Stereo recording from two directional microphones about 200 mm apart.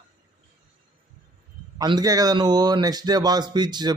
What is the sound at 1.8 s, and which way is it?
Speech, 20° right (ahead or behind).